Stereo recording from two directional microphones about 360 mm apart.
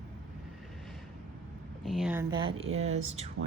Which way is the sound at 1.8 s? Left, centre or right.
Centre.